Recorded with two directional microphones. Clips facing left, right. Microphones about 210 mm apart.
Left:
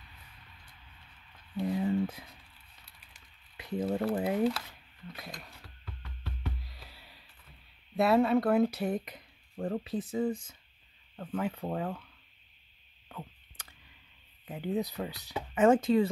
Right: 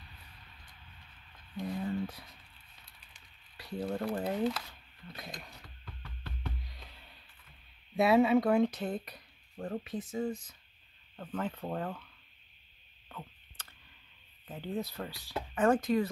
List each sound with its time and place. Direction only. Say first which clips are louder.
1.7 s a sound: left 5 dB; 20° left (ahead or behind)
3.5 s a sound: left 4 dB; 20° left (ahead or behind)
4.2 s speech: left 3 dB; 5° left (ahead or behind)
5.4 s knock: even; 5° left (ahead or behind)
7.9 s speech: even; centre (ahead or behind); by 9.7 s 20° left (ahead or behind)
9.8 s speech: left 4 dB; 35° left (ahead or behind)
11.1 s speech: left 3 dB; 10° left (ahead or behind)
13.1 s a sound: left 2 dB; 15° left (ahead or behind)
14.4 s speech: left 4 dB; 15° left (ahead or behind)